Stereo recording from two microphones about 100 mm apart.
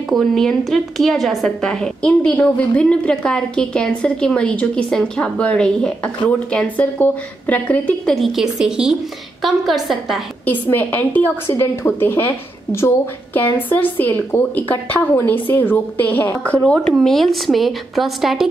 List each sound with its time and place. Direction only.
0.1 s a woman's voice: centre (ahead or behind)
10.4 s a woman's voice: 15° left (ahead or behind); by 18.5 s centre (ahead or behind)